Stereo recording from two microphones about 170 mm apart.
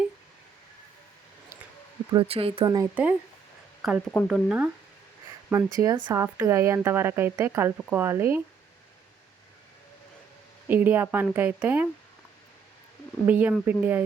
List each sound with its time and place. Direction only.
2.1 s speech: 35° right (ahead or behind)
2.6 s speech: 20° right (ahead or behind)
2.9 s speech: 10° right (ahead or behind)
10.7 s speech: 10° right (ahead or behind)
13.2 s speech: 10° right (ahead or behind)